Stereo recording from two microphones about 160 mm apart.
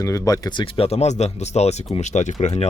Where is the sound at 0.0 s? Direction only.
20° left (ahead or behind).